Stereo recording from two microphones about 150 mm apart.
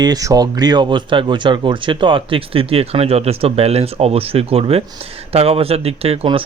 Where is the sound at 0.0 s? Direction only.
25° right (ahead or behind).